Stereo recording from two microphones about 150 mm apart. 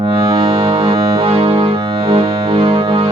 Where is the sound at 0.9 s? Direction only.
25° right (ahead or behind).